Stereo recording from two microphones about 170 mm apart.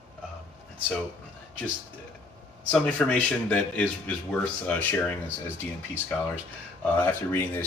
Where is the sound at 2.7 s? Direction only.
5° left (ahead or behind).